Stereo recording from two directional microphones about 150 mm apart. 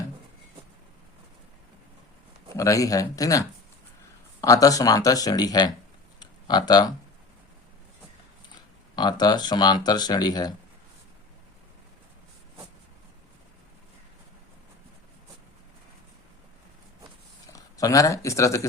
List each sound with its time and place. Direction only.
2.5 s speech: 20° left (ahead or behind)
6.1 s a sound: 30° left (ahead or behind)
9.0 s speech: 30° left (ahead or behind)
17.4 s speech: 25° left (ahead or behind)